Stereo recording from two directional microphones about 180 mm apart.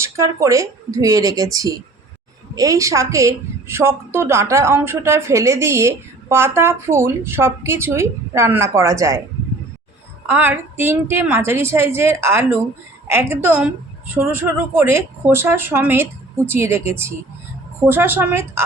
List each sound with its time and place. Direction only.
0.0 s a woman's voice: 15° right (ahead or behind)
10.2 s a woman's voice: 10° right (ahead or behind)